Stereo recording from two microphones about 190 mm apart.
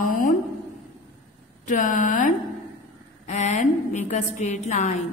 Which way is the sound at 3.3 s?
40° left (ahead or behind).